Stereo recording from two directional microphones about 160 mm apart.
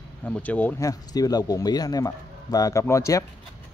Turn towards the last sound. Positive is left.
turn(degrees=20)  # may be behind; listen again after turning